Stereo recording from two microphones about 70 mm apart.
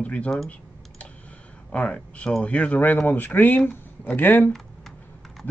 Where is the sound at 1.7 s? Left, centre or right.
Centre.